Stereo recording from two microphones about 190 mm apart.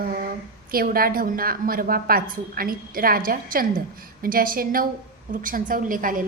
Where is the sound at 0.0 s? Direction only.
50° right (ahead or behind).